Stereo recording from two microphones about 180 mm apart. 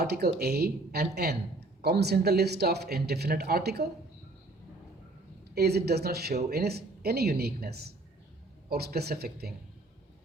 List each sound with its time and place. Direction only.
0.0 s speech: 60° right (ahead or behind)
5.5 s speech: 65° right (ahead or behind)